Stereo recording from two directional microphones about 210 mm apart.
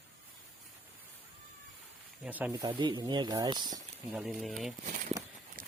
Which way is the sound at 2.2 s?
10° right (ahead or behind).